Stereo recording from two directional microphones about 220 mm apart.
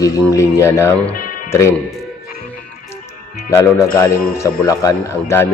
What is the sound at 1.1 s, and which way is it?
Music, 40° left (ahead or behind).